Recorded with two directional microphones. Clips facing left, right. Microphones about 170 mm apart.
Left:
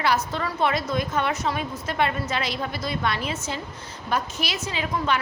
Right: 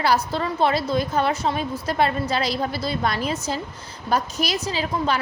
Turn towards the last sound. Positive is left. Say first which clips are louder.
# right 2 dB
turn(degrees=-35)  # may be behind; listen again after turning